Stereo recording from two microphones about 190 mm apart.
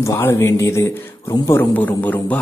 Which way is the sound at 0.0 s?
15° left (ahead or behind).